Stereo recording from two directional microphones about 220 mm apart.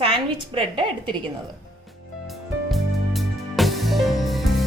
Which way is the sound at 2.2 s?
Centre (ahead or behind).